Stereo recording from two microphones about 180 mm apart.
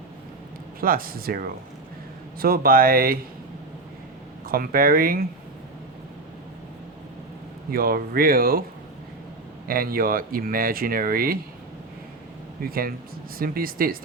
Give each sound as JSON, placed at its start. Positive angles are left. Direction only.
{"t": 0.8, "sound": "speech", "side_deg": -55}
{"t": 4.4, "sound": "speech", "side_deg": -55}
{"t": 7.7, "sound": "speech", "side_deg": -55}
{"t": 9.6, "sound": "speech", "side_deg": -55}
{"t": 12.6, "sound": "speech", "side_deg": -55}